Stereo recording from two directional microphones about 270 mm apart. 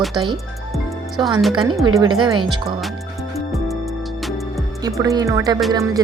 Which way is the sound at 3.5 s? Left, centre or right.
Centre.